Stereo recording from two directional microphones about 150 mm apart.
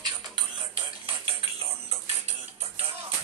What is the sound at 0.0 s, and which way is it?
Music, 30° right (ahead or behind).